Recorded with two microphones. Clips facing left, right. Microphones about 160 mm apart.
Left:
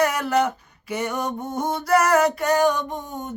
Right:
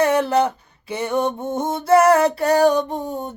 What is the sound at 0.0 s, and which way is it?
Mantra, 30° right (ahead or behind).